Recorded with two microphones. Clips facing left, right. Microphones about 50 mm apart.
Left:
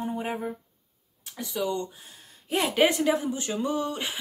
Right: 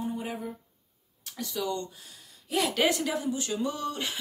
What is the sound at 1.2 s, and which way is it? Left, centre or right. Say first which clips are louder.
Speech: left 3 dB; centre.